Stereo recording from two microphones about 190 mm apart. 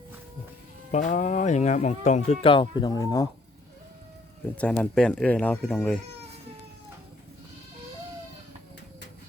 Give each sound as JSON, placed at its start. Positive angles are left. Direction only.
{"t": 0.9, "sound": "speech", "side_deg": 40}
{"t": 4.5, "sound": "speech", "side_deg": 5}